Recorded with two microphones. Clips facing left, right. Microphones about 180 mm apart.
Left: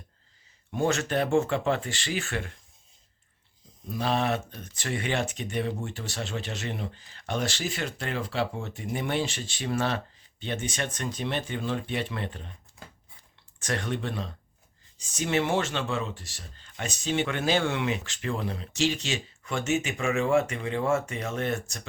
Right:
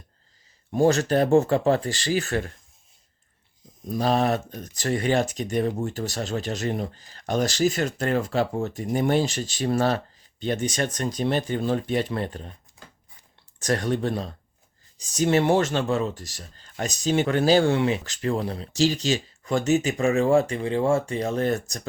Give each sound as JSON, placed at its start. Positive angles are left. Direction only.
{"t": 0.7, "sound": "speech", "side_deg": -35}
{"t": 3.8, "sound": "speech", "side_deg": -40}
{"t": 13.6, "sound": "speech", "side_deg": -40}